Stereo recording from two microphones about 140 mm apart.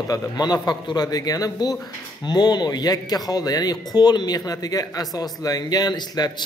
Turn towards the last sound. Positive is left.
turn(degrees=30)  # may be behind; listen again after turning